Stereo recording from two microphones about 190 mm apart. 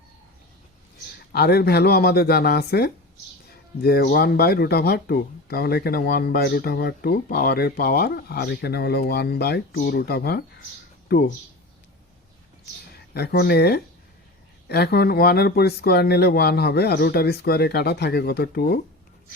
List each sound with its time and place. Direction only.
1.3 s speech: 55° left (ahead or behind)
13.1 s speech: 55° left (ahead or behind)